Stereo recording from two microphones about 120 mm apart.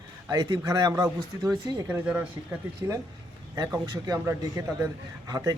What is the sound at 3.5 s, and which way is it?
A man's voice, 30° right (ahead or behind).